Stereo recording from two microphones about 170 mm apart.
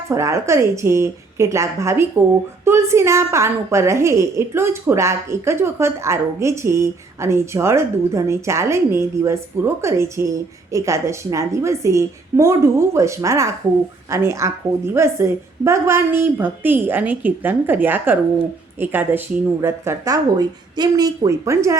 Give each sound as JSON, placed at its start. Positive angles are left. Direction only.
{"t": 0.1, "sound": "a woman's voice", "side_deg": -15}